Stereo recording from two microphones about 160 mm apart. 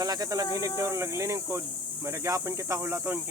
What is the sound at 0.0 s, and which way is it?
Speech, 25° right (ahead or behind).